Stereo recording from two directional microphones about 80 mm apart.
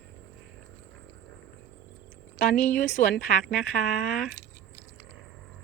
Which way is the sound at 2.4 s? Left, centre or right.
Centre.